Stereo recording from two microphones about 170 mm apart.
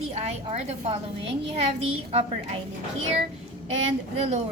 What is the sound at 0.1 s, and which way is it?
A woman's voice, 35° right (ahead or behind).